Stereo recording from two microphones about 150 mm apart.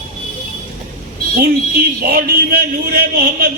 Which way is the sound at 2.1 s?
85° right.